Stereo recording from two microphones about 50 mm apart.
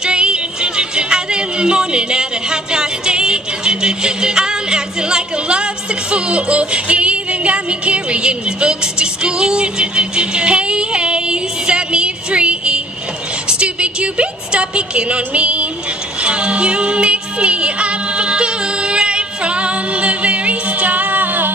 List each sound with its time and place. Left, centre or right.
0.0 s music: centre
13.5 s a sound: right
16.2 s music: right